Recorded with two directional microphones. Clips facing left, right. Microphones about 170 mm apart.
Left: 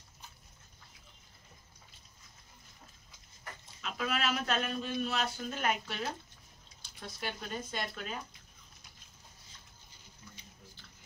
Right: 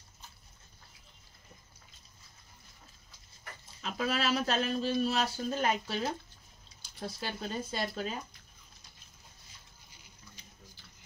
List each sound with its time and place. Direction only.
3.8 s speech: 35° right (ahead or behind)